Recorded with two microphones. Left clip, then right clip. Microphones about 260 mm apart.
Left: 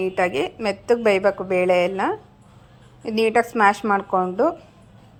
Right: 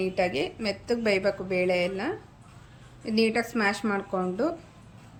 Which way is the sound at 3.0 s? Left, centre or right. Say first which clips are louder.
Left 5 dB; centre.